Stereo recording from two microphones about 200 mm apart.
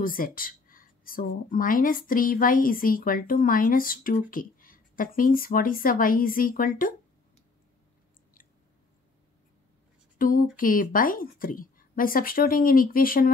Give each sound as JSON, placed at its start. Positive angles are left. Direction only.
{"t": 0.0, "sound": "speech", "side_deg": 45}
{"t": 10.1, "sound": "speech", "side_deg": 45}